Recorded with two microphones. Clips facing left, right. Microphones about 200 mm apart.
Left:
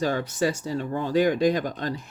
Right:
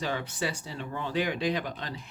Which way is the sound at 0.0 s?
45° left (ahead or behind).